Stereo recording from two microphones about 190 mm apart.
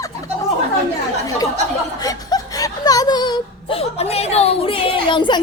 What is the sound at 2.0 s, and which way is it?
Whimper, 20° left (ahead or behind).